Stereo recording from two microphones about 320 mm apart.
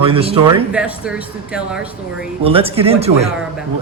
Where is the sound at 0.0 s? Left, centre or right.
Centre.